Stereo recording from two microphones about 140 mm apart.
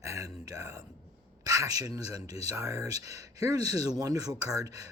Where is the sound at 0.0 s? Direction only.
25° right (ahead or behind).